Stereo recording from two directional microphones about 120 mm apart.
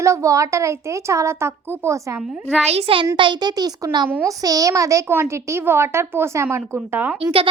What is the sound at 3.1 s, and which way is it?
A child's voice, 40° right (ahead or behind).